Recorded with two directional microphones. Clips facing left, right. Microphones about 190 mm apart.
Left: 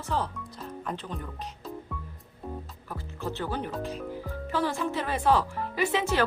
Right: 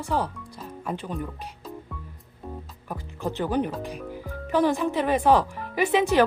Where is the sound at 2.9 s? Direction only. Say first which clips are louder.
Right 4 dB; 15° right (ahead or behind).